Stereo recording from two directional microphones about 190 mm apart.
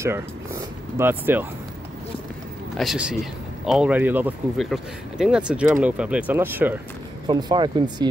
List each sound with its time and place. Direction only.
0.0 s speech: 15° right (ahead or behind)
2.8 s speech: centre (ahead or behind)
7.2 s speech: 20° right (ahead or behind)